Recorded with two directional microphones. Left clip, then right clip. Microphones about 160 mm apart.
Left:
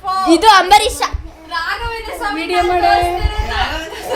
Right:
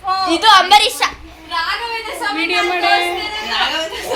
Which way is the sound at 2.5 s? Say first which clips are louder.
Left 3 dB; 90° left.